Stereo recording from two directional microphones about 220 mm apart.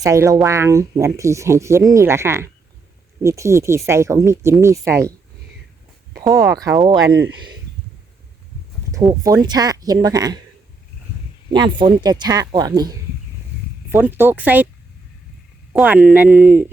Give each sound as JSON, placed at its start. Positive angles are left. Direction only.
{"t": 0.0, "sound": "speech", "side_deg": -15}
{"t": 6.3, "sound": "speech", "side_deg": -15}
{"t": 7.1, "sound": "speech", "side_deg": -55}
{"t": 8.9, "sound": "speech", "side_deg": -15}
{"t": 11.5, "sound": "speech", "side_deg": -20}
{"t": 15.7, "sound": "speech", "side_deg": -5}